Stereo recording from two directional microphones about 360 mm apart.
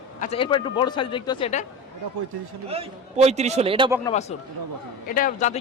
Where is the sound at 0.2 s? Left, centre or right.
Centre.